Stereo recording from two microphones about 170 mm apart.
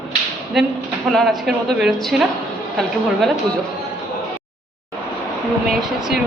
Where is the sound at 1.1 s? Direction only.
Centre (ahead or behind).